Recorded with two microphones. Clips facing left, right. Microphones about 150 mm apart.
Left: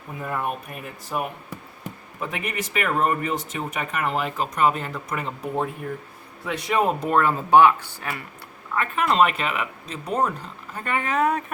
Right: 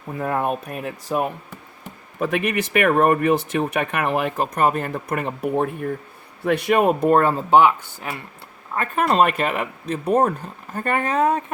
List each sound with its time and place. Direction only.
0.1 s speech: 60° right (ahead or behind)
7.1 s speech: 40° right (ahead or behind)
7.5 s speech: 20° right (ahead or behind)
8.7 s speech: 40° right (ahead or behind)